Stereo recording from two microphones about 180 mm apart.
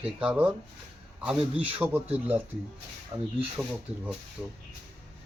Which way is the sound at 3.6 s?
5° right (ahead or behind).